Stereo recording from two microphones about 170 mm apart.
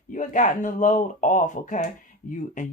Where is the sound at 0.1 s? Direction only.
45° left (ahead or behind).